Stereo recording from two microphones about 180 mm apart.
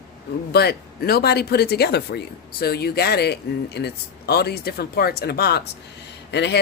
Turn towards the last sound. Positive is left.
turn(degrees=70)  # may be behind; listen again after turning